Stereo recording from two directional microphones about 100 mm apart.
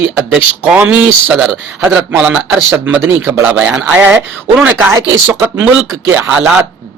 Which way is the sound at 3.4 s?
5° right (ahead or behind).